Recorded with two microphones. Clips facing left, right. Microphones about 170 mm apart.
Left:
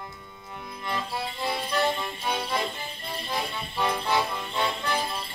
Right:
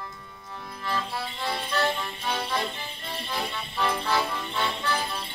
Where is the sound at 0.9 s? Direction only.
15° left (ahead or behind).